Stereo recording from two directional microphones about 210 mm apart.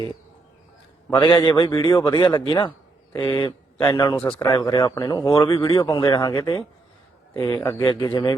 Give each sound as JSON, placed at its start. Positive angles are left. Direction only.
{"t": 1.1, "sound": "speech", "side_deg": 20}
{"t": 4.3, "sound": "speech", "side_deg": 5}
{"t": 4.5, "sound": "speech", "side_deg": 20}